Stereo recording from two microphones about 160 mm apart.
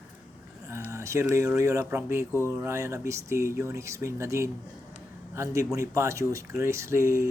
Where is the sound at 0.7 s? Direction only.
15° right (ahead or behind).